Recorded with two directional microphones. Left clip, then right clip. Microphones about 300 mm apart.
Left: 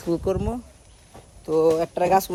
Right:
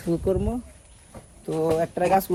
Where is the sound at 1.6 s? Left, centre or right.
Left.